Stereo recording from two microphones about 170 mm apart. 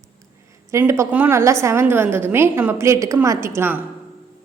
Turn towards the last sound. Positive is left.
turn(degrees=-10)  # may be behind; listen again after turning